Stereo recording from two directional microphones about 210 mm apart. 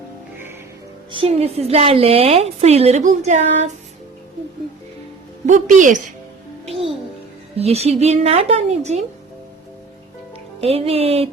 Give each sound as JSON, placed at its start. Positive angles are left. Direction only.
{"t": 1.1, "sound": "a woman's voice", "side_deg": -25}
{"t": 5.5, "sound": "a woman's voice", "side_deg": -35}
{"t": 7.5, "sound": "a woman's voice", "side_deg": -30}
{"t": 10.6, "sound": "a woman's voice", "side_deg": -30}